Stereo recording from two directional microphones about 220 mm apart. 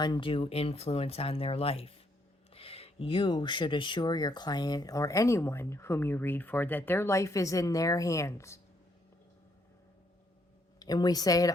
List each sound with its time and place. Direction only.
0.0 s speech: 20° left (ahead or behind)
10.8 s speech: 15° left (ahead or behind)